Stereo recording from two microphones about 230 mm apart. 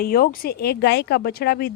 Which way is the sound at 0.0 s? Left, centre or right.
Left.